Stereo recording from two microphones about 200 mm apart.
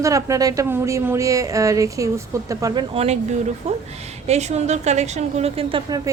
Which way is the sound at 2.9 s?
30° right (ahead or behind).